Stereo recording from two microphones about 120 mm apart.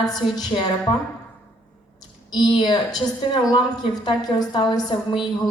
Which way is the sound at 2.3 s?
40° left (ahead or behind).